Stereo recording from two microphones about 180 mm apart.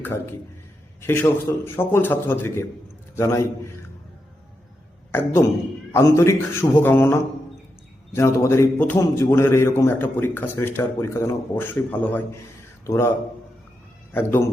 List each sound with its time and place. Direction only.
0.0 s a man's voice: 10° left (ahead or behind)
5.1 s a man's voice: 15° left (ahead or behind)
14.1 s a man's voice: 10° left (ahead or behind)